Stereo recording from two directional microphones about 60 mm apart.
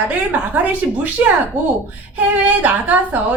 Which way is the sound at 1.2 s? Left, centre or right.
Right.